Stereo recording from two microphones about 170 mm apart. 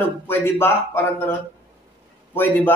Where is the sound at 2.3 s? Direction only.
10° left (ahead or behind).